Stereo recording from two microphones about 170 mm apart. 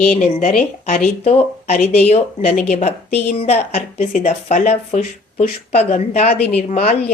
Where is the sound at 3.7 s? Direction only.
50° left (ahead or behind).